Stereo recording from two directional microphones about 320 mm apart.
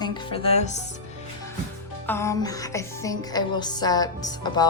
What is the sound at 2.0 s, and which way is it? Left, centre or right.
Speech, centre.